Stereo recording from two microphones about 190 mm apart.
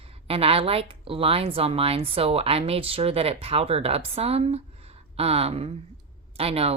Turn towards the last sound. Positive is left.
turn(degrees=-30)  # may be behind; listen again after turning